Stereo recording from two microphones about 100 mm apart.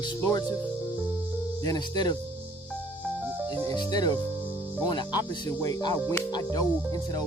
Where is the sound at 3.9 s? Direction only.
45° left (ahead or behind).